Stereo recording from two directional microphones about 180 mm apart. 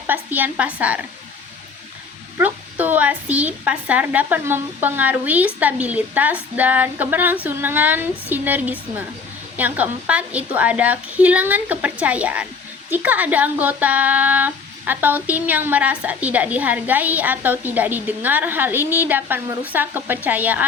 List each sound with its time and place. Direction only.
0.1 s speech: 10° right (ahead or behind)
2.4 s speech: 10° right (ahead or behind)